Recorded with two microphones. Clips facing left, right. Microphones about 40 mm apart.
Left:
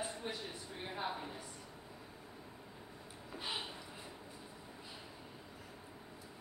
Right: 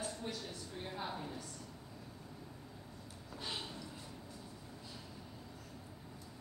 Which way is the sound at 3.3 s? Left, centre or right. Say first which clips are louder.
Left 2 dB; centre.